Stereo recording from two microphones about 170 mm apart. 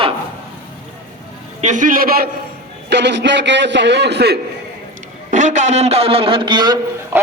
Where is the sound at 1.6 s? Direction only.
50° right (ahead or behind).